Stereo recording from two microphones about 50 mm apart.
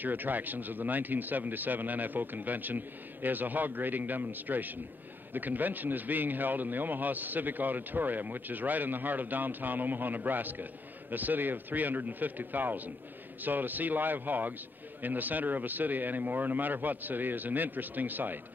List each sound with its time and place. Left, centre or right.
0.0 s a man's voice: right